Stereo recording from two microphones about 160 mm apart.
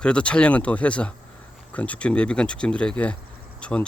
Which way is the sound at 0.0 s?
5° left (ahead or behind).